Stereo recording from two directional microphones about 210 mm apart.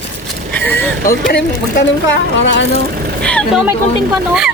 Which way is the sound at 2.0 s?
60° left (ahead or behind).